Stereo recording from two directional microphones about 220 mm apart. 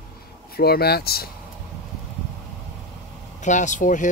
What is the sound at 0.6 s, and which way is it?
Speech, 45° left (ahead or behind).